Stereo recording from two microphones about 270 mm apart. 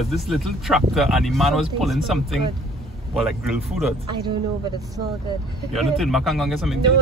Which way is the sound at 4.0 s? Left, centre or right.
Centre.